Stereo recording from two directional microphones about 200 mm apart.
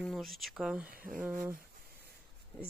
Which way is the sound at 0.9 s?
45° right (ahead or behind).